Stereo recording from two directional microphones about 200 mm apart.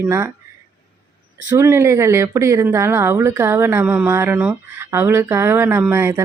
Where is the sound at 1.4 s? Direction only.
15° right (ahead or behind).